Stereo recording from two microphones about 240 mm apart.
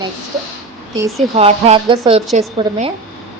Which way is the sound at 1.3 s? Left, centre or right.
Right.